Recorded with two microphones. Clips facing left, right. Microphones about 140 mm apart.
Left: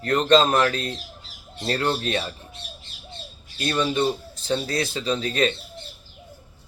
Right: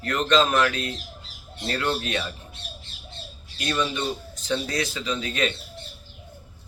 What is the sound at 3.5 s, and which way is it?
Speech, 35° left (ahead or behind).